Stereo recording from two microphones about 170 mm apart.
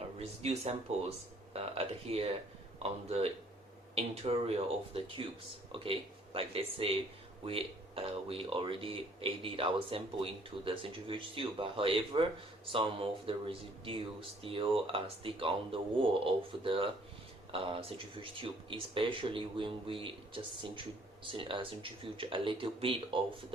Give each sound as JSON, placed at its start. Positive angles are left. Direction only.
{"t": 0.2, "sound": "speech", "side_deg": -35}